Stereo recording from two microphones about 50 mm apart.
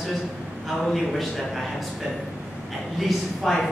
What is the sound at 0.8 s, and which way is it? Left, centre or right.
Speech, centre.